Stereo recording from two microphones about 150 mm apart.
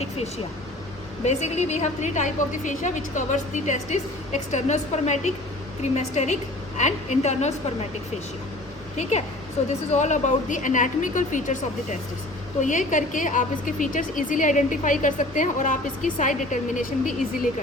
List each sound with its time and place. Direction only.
1.2 s a woman's voice: 45° left (ahead or behind)
9.0 s a woman's voice: 45° left (ahead or behind)